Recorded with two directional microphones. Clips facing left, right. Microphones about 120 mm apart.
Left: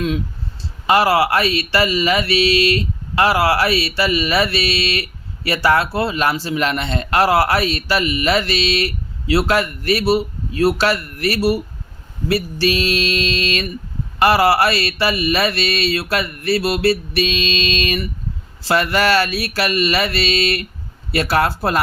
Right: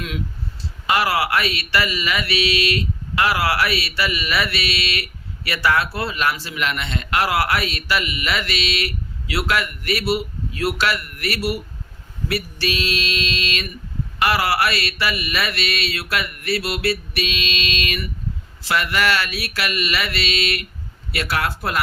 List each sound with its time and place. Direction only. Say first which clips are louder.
0.9 s mantra: left 5 dB; 30° left (ahead or behind)